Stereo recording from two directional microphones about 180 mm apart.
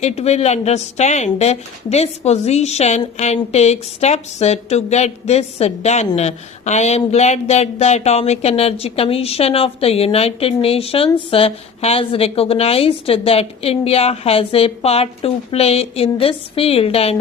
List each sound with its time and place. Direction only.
0.0 s speech: 35° left (ahead or behind)